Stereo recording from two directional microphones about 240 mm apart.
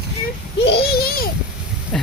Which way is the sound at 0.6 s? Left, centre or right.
Left.